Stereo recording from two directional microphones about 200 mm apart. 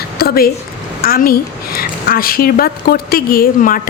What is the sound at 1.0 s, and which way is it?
A woman's voice, 45° left (ahead or behind).